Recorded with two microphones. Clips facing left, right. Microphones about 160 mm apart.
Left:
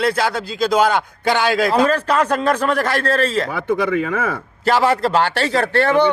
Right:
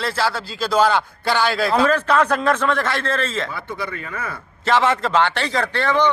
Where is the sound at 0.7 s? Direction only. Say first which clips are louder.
Even; 15° left (ahead or behind).